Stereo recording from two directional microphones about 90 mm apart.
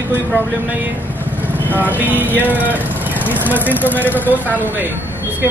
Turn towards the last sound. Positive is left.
turn(degrees=-20)  # may be behind; listen again after turning